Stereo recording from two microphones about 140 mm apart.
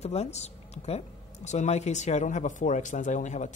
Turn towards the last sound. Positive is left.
turn(degrees=60)  # may be behind; listen again after turning